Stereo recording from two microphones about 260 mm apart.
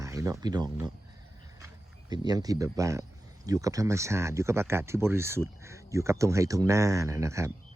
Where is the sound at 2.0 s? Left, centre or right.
Centre.